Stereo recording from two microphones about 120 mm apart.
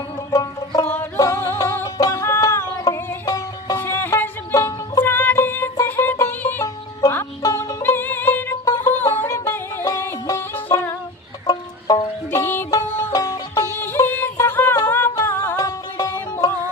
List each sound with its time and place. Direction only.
0.3 s music: 30° left (ahead or behind)
0.9 s music: 15° left (ahead or behind)
3.8 s music: 15° left (ahead or behind)
7.4 s music: 30° left (ahead or behind)
7.8 s music: 20° left (ahead or behind)
12.3 s music: 20° left (ahead or behind)